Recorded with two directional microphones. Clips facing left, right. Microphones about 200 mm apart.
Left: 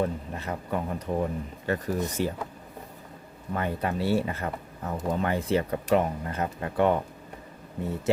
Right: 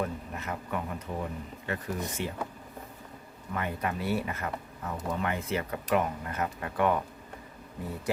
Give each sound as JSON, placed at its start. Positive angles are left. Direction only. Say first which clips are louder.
{"t": 0.0, "sound": "speech", "louder": "left 4 dB", "side_deg": 30}
{"t": 3.5, "sound": "speech", "louder": "left 4 dB", "side_deg": 35}